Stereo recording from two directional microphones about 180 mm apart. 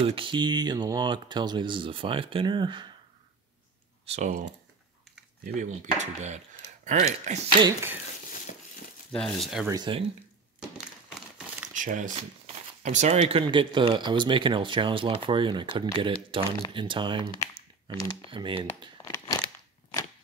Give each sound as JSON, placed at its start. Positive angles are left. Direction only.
{"t": 0.0, "sound": "speech", "side_deg": -30}
{"t": 4.0, "sound": "speech", "side_deg": -40}
{"t": 7.6, "sound": "speech", "side_deg": -15}
{"t": 9.1, "sound": "speech", "side_deg": 5}
{"t": 9.7, "sound": "speech", "side_deg": -25}
{"t": 11.1, "sound": "crumpling", "side_deg": -5}
{"t": 11.7, "sound": "speech", "side_deg": -45}
{"t": 18.3, "sound": "speech", "side_deg": -25}
{"t": 19.0, "sound": "a sound", "side_deg": 20}